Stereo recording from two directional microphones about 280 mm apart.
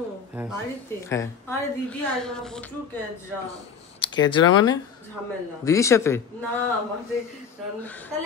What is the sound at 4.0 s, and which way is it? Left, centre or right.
A woman's voice, centre.